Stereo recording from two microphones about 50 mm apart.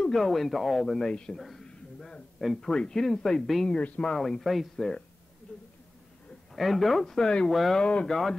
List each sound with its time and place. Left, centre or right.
0.1 s speech: centre
1.3 s speech: centre
2.0 s a sound: centre
2.3 s speech: centre
2.7 s speech: centre
5.5 s speech: left
6.5 s speech: centre
7.4 s speech: centre
7.7 s speech: left
8.1 s speech: centre